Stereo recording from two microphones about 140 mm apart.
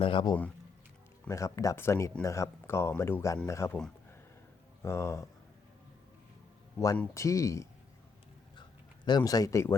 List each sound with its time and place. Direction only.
0.0 s speech: 35° left (ahead or behind)
1.3 s speech: 20° left (ahead or behind)
4.8 s speech: 20° left (ahead or behind)
6.7 s speech: 25° left (ahead or behind)
9.0 s speech: 30° left (ahead or behind)